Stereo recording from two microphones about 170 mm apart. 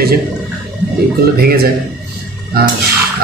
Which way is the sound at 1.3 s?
65° right (ahead or behind).